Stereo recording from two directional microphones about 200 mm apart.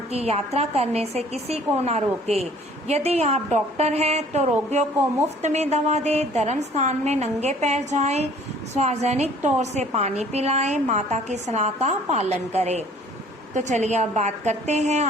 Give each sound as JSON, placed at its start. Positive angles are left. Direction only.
{"t": 0.1, "sound": "a woman's voice", "side_deg": -30}